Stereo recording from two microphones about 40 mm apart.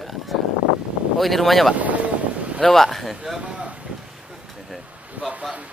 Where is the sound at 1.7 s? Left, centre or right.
Right.